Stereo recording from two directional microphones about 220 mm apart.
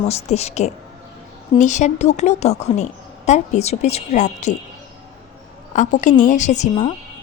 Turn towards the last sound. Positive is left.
turn(degrees=30)  # may be behind; listen again after turning